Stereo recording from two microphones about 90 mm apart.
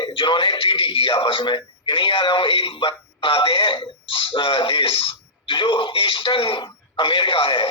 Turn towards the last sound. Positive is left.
turn(degrees=70)  # may be behind; listen again after turning